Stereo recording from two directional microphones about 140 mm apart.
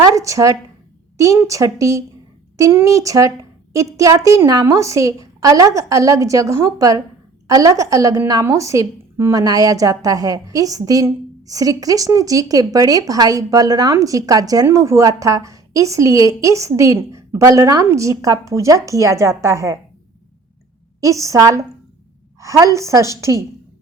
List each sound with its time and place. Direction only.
0.0 s a woman's voice: 25° right (ahead or behind)
21.0 s a woman's voice: 20° right (ahead or behind)